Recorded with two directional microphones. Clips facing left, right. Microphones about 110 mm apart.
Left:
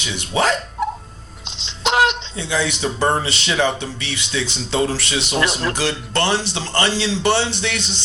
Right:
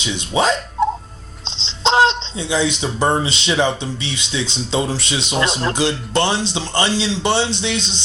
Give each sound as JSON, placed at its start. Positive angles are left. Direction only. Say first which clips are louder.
{"t": 0.0, "sound": "speech", "louder": "right 2 dB", "side_deg": -20}